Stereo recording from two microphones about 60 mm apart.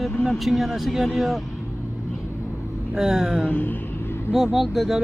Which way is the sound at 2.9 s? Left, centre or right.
Centre.